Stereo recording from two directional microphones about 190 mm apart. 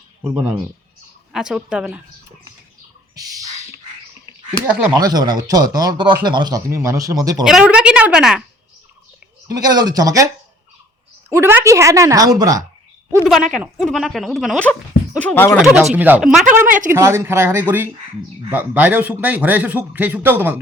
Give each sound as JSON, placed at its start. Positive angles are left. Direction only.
{"t": 0.3, "sound": "speech", "side_deg": -5}
{"t": 4.6, "sound": "speech", "side_deg": -15}
{"t": 7.4, "sound": "a woman's voice", "side_deg": -5}
{"t": 9.5, "sound": "speech", "side_deg": -20}
{"t": 11.3, "sound": "a man's voice", "side_deg": -15}
{"t": 13.2, "sound": "speech", "side_deg": 0}
{"t": 16.0, "sound": "speech", "side_deg": -10}
{"t": 16.6, "sound": "speech", "side_deg": -45}
{"t": 16.9, "sound": "a man's voice", "side_deg": -15}